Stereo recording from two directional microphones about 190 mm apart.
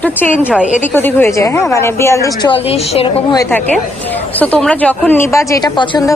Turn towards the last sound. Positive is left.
turn(degrees=20)  # may be behind; listen again after turning